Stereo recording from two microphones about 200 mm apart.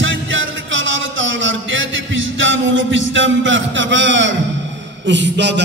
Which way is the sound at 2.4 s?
70° right (ahead or behind).